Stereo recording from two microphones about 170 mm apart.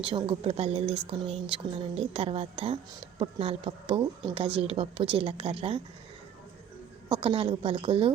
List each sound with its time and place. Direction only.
0.0 s speech: 30° right (ahead or behind)
7.2 s speech: 30° right (ahead or behind)